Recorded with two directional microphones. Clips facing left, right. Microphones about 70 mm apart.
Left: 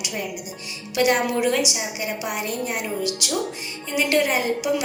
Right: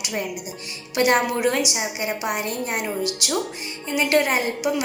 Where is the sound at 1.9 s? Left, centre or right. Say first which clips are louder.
Right 2 dB; right.